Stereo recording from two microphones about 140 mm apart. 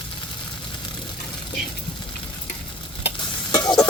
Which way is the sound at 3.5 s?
30° left (ahead or behind).